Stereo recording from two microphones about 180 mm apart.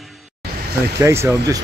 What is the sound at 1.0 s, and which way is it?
Speech, 15° right (ahead or behind).